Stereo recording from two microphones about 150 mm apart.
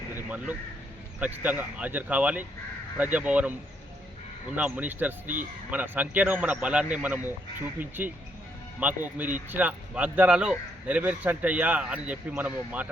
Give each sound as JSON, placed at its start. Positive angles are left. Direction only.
{"t": 0.3, "sound": "a man's voice", "side_deg": -10}
{"t": 4.5, "sound": "a man's voice", "side_deg": -10}
{"t": 5.2, "sound": "speech", "side_deg": -60}
{"t": 5.7, "sound": "a man's voice", "side_deg": -10}